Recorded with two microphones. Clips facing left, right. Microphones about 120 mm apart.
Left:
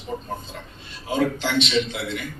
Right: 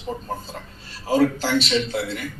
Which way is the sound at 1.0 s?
35° right (ahead or behind).